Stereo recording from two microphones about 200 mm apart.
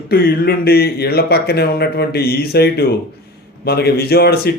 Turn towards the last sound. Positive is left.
turn(degrees=50)  # may be behind; listen again after turning